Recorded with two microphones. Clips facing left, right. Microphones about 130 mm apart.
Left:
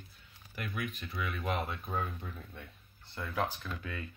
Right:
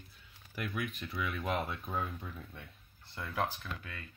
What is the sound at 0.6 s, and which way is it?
Speech, centre (ahead or behind).